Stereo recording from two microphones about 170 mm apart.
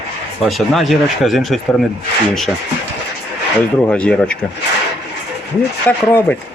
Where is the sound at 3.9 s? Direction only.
5° left (ahead or behind).